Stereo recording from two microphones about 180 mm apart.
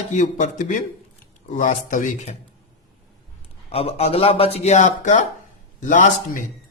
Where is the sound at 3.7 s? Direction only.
35° left (ahead or behind).